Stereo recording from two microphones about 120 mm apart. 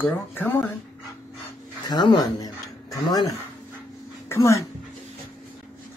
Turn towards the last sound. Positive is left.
turn(degrees=25)  # may be behind; listen again after turning